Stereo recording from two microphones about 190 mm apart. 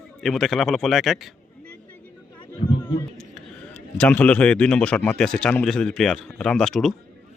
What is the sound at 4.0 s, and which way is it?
Speech, 5° left (ahead or behind).